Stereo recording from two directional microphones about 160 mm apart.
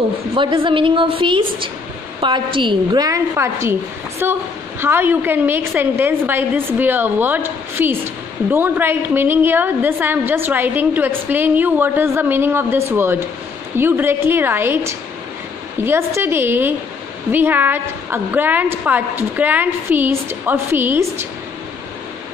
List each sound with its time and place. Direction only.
0.3 s a woman's voice: 30° right (ahead or behind); by 21.3 s 15° right (ahead or behind)